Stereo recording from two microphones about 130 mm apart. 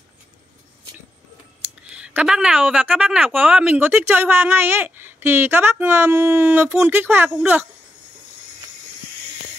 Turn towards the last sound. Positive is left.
turn(degrees=-10)  # may be behind; listen again after turning